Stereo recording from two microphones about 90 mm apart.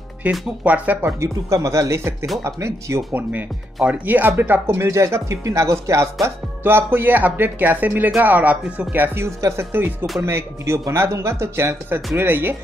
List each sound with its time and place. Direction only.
0.2 s speech: 15° right (ahead or behind)
1.0 s chopping: 35° right (ahead or behind)
3.1 s speech: 20° right (ahead or behind)
4.6 s chopping: 30° right (ahead or behind)
6.2 s speech: 25° right (ahead or behind)